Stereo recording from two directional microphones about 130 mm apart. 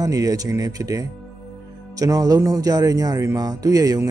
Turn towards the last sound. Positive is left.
turn(degrees=-30)  # may be behind; listen again after turning